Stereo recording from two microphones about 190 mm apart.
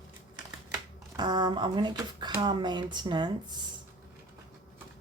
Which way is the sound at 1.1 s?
20° right (ahead or behind).